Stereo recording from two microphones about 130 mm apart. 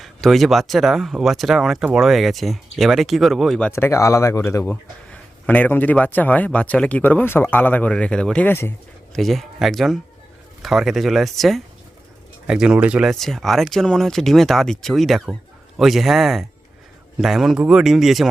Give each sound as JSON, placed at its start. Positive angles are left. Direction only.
{"t": 0.0, "sound": "speech", "side_deg": 0}
{"t": 3.7, "sound": "speech", "side_deg": 20}
{"t": 4.7, "sound": "speech", "side_deg": 10}
{"t": 9.1, "sound": "speech", "side_deg": 0}